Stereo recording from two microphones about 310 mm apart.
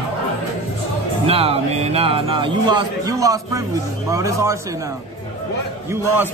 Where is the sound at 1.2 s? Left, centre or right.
Centre.